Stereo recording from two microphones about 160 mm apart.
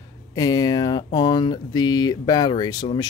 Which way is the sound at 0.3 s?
25° left (ahead or behind).